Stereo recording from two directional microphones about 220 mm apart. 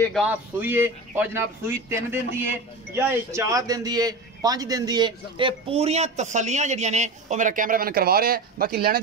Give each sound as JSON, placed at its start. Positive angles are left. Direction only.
{"t": 0.0, "sound": "a man's voice", "side_deg": 0}